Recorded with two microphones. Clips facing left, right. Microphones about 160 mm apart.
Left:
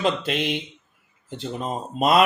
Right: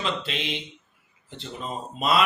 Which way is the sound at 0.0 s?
50° left (ahead or behind).